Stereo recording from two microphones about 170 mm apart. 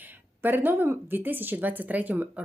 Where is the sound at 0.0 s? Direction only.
10° right (ahead or behind).